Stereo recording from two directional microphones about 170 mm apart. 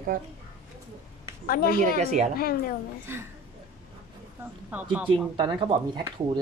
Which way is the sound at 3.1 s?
15° right (ahead or behind).